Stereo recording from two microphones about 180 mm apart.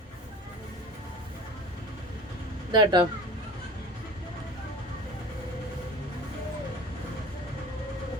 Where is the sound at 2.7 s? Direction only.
25° right (ahead or behind).